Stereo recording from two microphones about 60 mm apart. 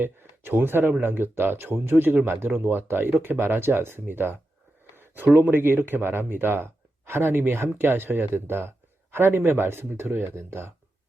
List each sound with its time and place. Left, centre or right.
0.0 s speech: right